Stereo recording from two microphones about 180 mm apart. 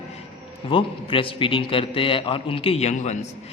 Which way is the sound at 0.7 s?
30° left (ahead or behind).